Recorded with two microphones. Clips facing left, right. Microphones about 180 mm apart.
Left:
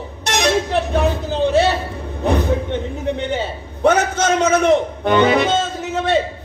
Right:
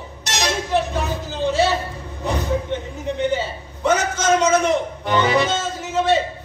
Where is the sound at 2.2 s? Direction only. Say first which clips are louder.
Left 5 dB; 60° left (ahead or behind).